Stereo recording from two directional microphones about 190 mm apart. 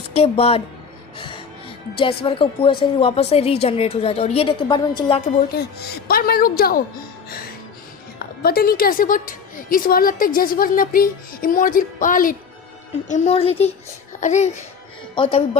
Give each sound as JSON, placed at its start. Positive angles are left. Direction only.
{"t": 0.1, "sound": "a woman's voice", "side_deg": 35}
{"t": 2.0, "sound": "a woman's voice", "side_deg": 30}
{"t": 5.5, "sound": "a woman's voice", "side_deg": 55}
{"t": 8.4, "sound": "a woman's voice", "side_deg": 55}
{"t": 15.1, "sound": "a woman's voice", "side_deg": 30}